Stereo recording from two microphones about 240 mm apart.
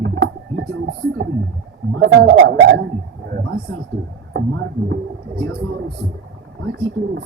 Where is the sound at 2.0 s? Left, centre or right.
Right.